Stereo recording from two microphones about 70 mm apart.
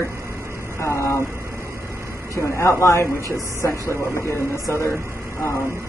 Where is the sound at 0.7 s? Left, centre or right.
Left.